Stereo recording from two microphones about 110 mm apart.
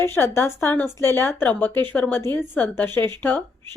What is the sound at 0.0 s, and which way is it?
A woman's voice, 20° left (ahead or behind).